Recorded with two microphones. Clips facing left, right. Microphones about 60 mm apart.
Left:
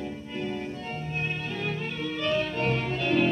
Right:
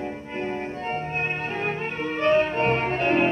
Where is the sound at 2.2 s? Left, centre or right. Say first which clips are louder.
Right 7 dB; right.